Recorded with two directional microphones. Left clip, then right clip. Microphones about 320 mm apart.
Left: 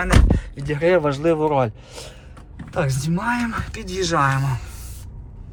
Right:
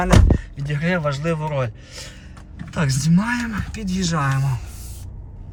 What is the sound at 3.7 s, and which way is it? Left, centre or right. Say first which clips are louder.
Speech: left 6 dB; centre.